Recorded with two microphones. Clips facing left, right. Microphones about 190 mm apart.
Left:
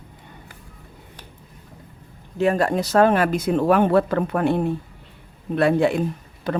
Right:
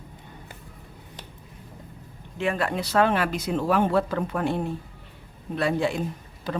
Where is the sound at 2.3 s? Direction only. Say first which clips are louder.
Left 7 dB; 40° left (ahead or behind).